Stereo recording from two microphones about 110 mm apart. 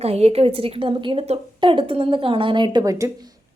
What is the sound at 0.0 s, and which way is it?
A woman's voice, 70° right (ahead or behind).